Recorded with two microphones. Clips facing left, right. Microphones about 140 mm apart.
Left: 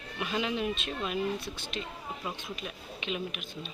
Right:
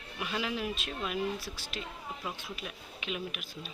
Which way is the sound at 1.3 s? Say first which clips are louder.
Left 3 dB; 20° left (ahead or behind).